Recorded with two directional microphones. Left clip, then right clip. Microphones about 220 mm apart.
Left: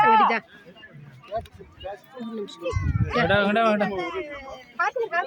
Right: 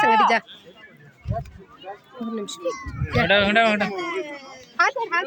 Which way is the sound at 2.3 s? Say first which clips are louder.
Right 3 dB; 45° right (ahead or behind).